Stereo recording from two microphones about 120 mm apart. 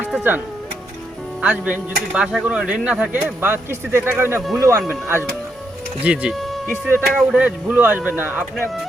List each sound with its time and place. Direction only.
0.0 s speech: 15° right (ahead or behind)
4.4 s speech: 5° right (ahead or behind)
4.9 s speech: 20° right (ahead or behind)
6.7 s speech: 15° right (ahead or behind)